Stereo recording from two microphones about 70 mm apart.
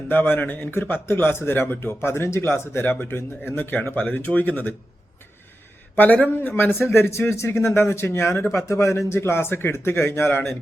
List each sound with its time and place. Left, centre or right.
0.1 s speech: left
6.3 s speech: left